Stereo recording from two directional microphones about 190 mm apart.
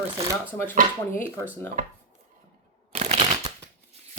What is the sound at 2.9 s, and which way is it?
Shuffling cards, 35° right (ahead or behind).